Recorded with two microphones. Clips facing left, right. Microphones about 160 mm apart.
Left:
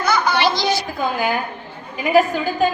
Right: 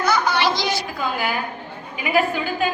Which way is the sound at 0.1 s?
90° left.